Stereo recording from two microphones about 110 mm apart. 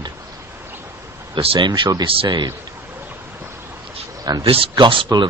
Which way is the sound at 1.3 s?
50° right (ahead or behind).